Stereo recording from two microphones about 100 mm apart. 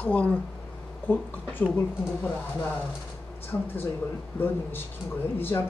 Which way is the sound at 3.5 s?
25° left (ahead or behind).